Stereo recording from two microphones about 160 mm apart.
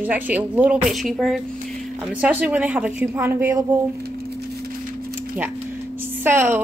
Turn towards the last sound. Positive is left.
turn(degrees=-15)  # may be behind; listen again after turning